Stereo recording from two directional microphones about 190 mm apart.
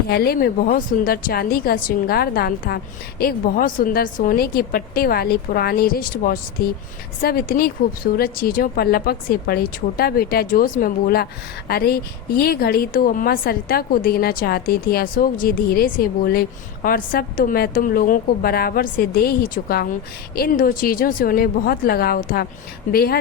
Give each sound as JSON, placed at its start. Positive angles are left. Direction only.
{"t": 0.1, "sound": "a woman's voice", "side_deg": 55}